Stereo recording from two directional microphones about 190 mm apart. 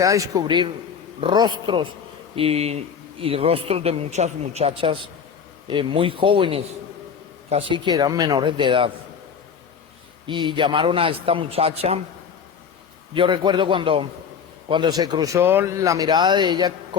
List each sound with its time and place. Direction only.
0.0 s speech: 20° right (ahead or behind)
10.2 s speech: 25° right (ahead or behind)
13.1 s speech: 25° right (ahead or behind)